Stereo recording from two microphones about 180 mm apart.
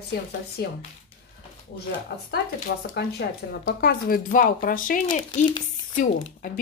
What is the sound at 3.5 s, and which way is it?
Speech, 65° left (ahead or behind).